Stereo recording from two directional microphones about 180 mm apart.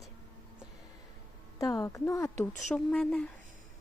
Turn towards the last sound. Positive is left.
turn(degrees=5)  # may be behind; listen again after turning